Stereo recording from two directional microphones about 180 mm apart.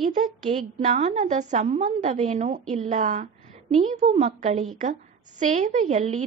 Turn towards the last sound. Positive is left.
turn(degrees=-40)  # may be behind; listen again after turning